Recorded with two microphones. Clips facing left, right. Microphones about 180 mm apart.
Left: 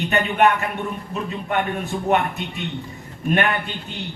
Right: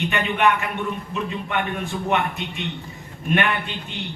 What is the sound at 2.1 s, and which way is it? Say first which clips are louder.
Speech: left 3 dB; 40° left (ahead or behind).